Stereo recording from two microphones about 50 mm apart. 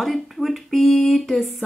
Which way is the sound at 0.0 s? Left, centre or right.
Centre.